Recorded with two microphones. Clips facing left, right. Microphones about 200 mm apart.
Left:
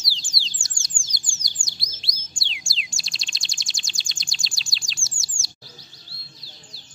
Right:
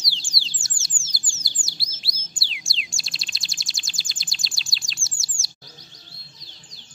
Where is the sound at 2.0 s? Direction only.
5° right (ahead or behind).